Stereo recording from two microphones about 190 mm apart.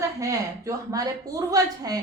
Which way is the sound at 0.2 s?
15° right (ahead or behind).